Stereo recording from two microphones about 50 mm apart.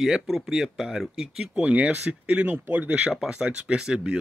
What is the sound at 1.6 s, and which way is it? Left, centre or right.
Speech, right.